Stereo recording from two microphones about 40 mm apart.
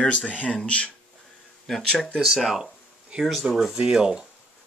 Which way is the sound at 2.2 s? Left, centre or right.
Centre.